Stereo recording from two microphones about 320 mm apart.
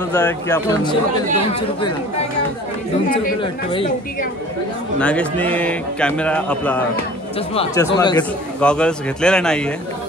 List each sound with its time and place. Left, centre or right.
0.1 s speech: centre
3.1 s speech: left
4.9 s speech: centre